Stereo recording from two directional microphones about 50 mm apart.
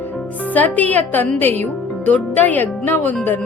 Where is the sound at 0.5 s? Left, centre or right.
Left.